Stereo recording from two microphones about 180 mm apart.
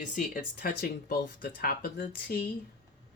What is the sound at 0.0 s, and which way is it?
Speech, 50° left (ahead or behind).